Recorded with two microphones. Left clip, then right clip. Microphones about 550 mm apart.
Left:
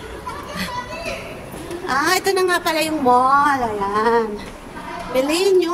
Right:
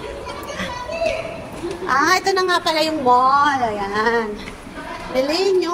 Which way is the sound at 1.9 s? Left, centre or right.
Left.